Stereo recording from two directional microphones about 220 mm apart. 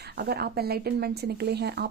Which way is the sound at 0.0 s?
45° right (ahead or behind).